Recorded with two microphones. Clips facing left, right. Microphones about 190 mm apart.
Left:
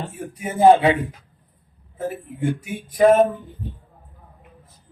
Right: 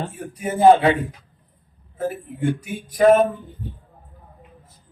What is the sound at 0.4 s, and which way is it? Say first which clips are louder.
Speech: even; 20° left (ahead or behind).